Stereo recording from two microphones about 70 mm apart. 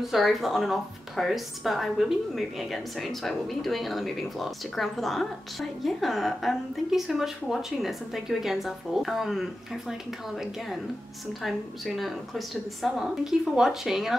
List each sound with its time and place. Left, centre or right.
0.0 s a woman's voice: centre
11.4 s a woman's voice: centre